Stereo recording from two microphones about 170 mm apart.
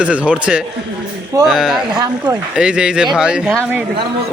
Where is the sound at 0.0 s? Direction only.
5° right (ahead or behind).